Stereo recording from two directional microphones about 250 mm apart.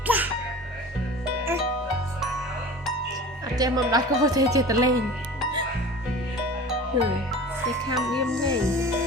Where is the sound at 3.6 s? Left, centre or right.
Centre.